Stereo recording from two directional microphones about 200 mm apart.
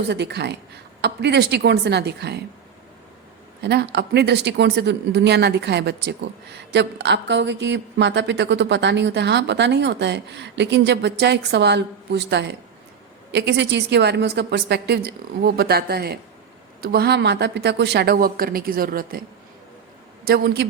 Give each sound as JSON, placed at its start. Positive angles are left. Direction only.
{"t": 0.1, "sound": "speech", "side_deg": -55}
{"t": 3.6, "sound": "a woman's voice", "side_deg": -55}
{"t": 20.2, "sound": "a woman's voice", "side_deg": -50}